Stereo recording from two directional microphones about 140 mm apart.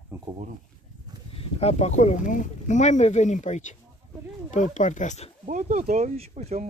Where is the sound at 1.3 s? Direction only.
45° left (ahead or behind); by 5.3 s 60° left (ahead or behind).